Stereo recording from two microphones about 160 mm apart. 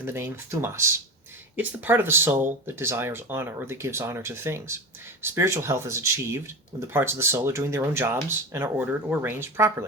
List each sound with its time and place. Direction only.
0.0 s speech: 15° right (ahead or behind)